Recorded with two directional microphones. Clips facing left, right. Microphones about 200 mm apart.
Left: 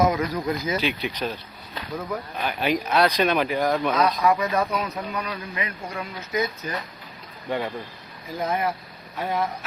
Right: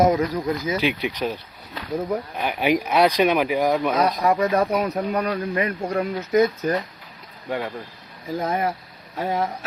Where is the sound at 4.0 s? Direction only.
50° right (ahead or behind).